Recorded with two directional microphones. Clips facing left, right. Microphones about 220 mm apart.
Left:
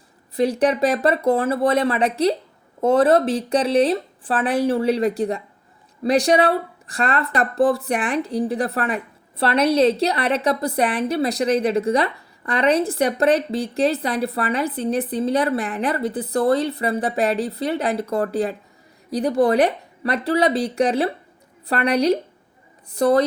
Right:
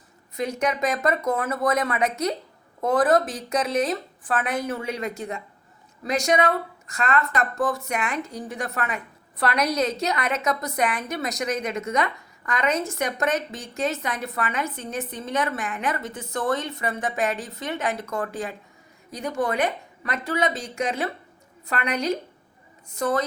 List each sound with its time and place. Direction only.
0.3 s a woman's voice: 30° left (ahead or behind)